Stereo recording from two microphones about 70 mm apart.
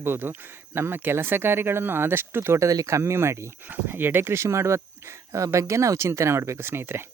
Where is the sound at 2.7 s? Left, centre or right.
Right.